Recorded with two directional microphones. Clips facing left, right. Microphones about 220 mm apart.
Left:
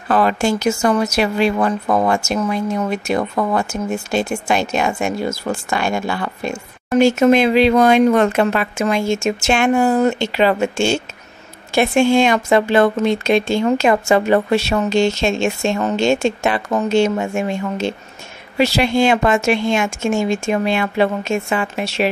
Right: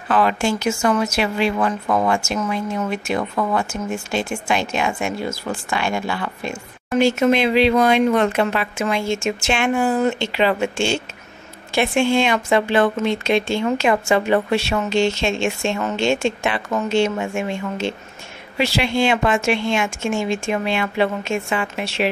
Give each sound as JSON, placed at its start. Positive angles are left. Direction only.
{"t": 0.1, "sound": "a woman's voice", "side_deg": 40}